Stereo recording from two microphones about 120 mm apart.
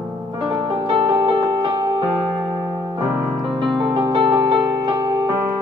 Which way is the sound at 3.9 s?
40° right (ahead or behind).